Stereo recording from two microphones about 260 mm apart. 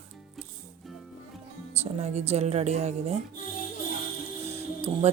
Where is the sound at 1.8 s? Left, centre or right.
Right.